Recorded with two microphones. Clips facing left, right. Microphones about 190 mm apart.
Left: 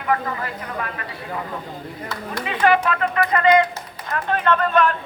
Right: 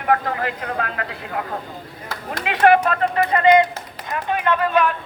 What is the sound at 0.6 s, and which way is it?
Speech, 75° right (ahead or behind).